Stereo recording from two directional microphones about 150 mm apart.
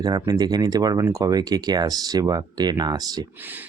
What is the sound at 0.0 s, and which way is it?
Speech, 25° right (ahead or behind).